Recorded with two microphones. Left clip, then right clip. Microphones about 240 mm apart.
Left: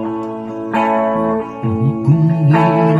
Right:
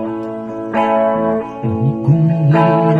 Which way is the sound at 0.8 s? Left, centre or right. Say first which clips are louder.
Right 2 dB; left.